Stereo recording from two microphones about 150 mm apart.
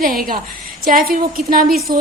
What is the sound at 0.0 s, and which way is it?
A woman's voice, 75° right (ahead or behind).